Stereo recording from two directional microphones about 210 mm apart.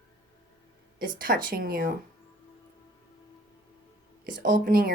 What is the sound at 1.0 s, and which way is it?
Speech, 40° right (ahead or behind).